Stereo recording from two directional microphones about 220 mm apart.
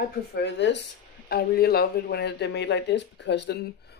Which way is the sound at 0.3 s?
50° left (ahead or behind).